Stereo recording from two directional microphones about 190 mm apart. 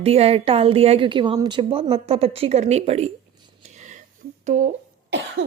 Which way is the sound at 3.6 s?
40° right (ahead or behind).